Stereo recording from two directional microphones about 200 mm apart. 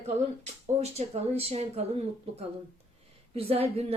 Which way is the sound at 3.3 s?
30° right (ahead or behind).